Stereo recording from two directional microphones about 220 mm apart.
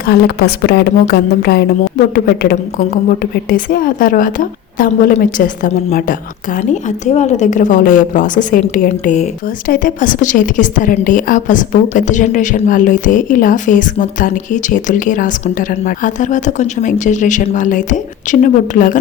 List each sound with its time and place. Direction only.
0.0 s a woman's voice: 45° left (ahead or behind)